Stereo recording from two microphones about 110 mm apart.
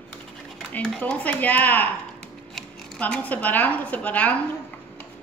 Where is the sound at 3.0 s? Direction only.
15° left (ahead or behind).